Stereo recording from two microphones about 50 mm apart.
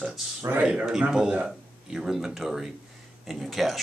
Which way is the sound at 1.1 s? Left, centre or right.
Centre.